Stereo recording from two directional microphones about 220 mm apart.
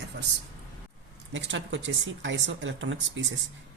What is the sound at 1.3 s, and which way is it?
Speech, 55° right (ahead or behind).